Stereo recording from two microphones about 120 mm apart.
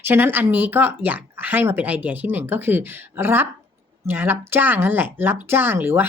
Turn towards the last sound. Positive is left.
turn(degrees=-20)  # may be behind; listen again after turning